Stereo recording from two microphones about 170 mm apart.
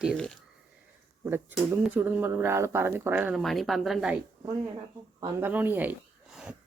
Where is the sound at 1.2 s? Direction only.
10° right (ahead or behind).